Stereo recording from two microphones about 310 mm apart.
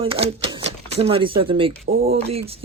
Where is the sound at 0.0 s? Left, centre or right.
Centre.